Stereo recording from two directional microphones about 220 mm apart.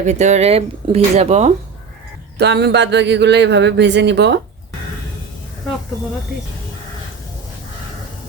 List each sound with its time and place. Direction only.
0.0 s speech: 30° right (ahead or behind)
2.4 s speech: 50° right (ahead or behind)